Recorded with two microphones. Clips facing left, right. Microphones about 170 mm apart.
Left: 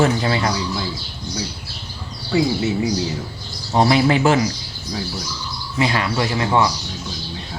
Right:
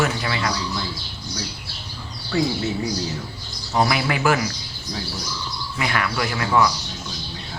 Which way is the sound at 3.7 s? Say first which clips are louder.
Left 5 dB; 25° left (ahead or behind).